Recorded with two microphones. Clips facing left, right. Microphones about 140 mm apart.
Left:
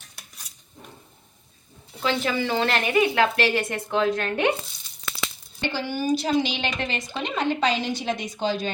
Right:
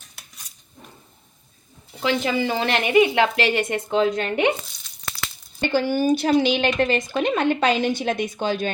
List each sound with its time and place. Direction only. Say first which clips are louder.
2.0 s a woman's voice: right 3 dB; 15° right (ahead or behind)
5.5 s a woman's voice: right 7 dB; 50° right (ahead or behind)
7.2 s speech: right 3 dB; 55° right (ahead or behind)